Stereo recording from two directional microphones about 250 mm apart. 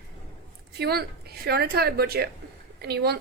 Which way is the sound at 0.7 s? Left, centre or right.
Right.